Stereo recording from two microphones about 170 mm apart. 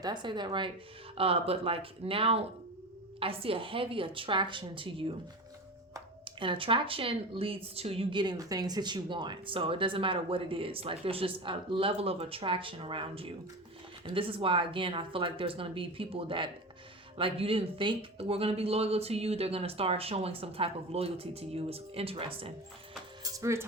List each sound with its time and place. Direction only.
0.0 s a woman's voice: 25° right (ahead or behind)
6.2 s speech: 30° right (ahead or behind)
23.3 s speech: 15° right (ahead or behind)